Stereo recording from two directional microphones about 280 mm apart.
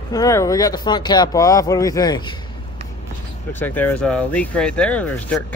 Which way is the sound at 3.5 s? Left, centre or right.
Centre.